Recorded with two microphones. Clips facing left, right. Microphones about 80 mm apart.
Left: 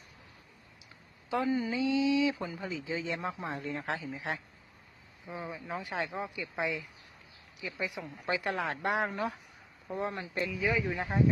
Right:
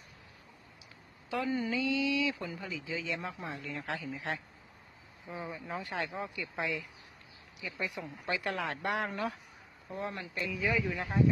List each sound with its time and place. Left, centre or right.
1.5 s speech: centre
1.7 s speech: left
4.1 s speech: centre
5.8 s speech: centre
9.0 s speech: centre
9.9 s speech: left